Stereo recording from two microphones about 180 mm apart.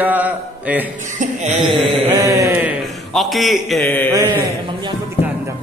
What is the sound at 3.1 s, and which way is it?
A man's voice, centre (ahead or behind).